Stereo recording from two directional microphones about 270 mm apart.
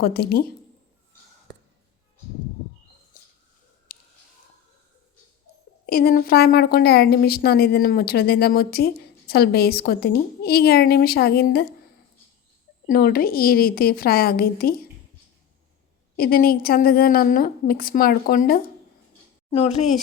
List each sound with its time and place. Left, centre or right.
0.0 s a woman's voice: left
3.9 s a sound: left
5.8 s a woman's voice: left
12.9 s a woman's voice: left
16.1 s a woman's voice: left